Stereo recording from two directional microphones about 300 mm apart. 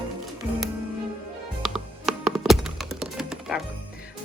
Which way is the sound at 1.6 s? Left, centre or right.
Centre.